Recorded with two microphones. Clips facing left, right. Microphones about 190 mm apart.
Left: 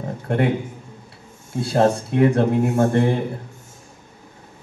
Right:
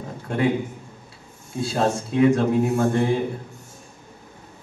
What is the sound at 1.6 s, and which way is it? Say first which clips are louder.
Speech: left 5 dB; 60° left (ahead or behind).